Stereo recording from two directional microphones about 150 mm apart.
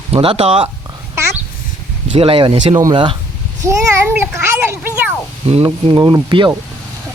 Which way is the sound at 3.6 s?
15° right (ahead or behind).